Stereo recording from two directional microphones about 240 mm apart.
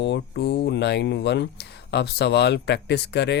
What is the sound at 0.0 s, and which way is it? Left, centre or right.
Speech, left.